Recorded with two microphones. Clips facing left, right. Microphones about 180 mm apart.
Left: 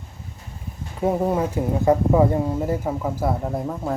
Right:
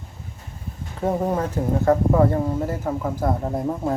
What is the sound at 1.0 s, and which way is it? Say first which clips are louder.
Speech: left 2 dB; 10° left (ahead or behind).